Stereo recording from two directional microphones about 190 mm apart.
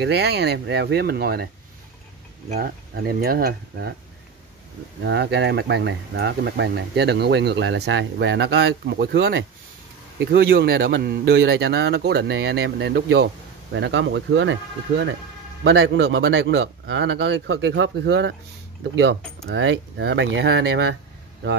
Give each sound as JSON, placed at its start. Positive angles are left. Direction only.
{"t": 0.0, "sound": "speech", "side_deg": -60}
{"t": 2.5, "sound": "speech", "side_deg": -50}
{"t": 5.0, "sound": "speech", "side_deg": -60}
{"t": 13.7, "sound": "speech", "side_deg": -70}